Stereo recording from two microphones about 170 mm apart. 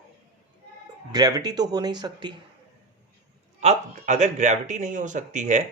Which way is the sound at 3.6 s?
40° right (ahead or behind).